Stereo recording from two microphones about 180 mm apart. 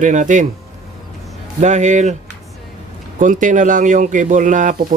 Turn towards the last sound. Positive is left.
turn(degrees=-45)  # may be behind; listen again after turning